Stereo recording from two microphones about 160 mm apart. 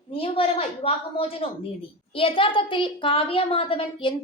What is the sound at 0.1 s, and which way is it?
A woman's voice, 35° left (ahead or behind).